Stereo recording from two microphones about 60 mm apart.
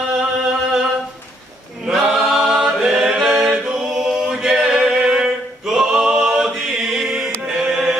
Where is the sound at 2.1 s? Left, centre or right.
Centre.